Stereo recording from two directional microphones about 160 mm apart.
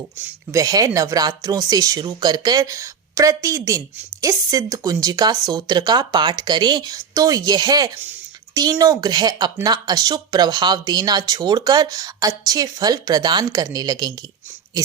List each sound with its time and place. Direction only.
0.2 s speech: 20° right (ahead or behind)